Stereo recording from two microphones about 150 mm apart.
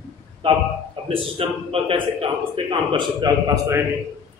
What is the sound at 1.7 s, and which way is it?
A man's voice, 40° right (ahead or behind).